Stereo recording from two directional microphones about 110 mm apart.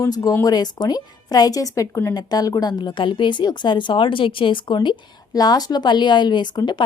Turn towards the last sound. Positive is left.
turn(degrees=45)  # may be behind; listen again after turning